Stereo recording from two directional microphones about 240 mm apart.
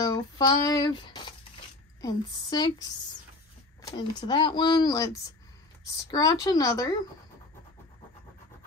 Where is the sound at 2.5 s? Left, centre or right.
Centre.